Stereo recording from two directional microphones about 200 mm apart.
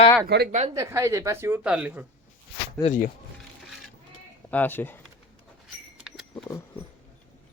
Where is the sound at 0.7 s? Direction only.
15° right (ahead or behind).